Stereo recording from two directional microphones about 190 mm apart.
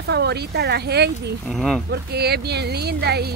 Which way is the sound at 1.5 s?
Centre (ahead or behind).